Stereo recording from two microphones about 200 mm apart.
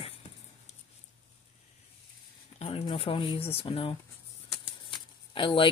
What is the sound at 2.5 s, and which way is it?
Speech, 30° left (ahead or behind).